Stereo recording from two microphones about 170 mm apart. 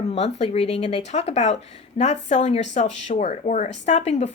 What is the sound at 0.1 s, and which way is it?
Speech, 40° left (ahead or behind).